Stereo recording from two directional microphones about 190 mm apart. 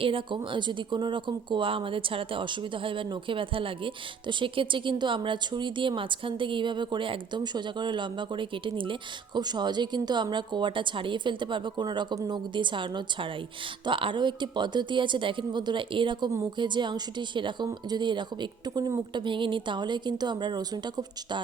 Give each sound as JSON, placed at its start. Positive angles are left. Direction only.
{"t": 0.0, "sound": "speech", "side_deg": -25}